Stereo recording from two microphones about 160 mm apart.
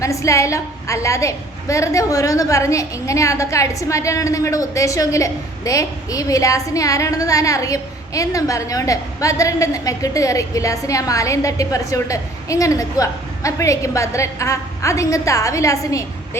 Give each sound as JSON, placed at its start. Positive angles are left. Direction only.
{"t": 0.0, "sound": "a woman's voice", "side_deg": 20}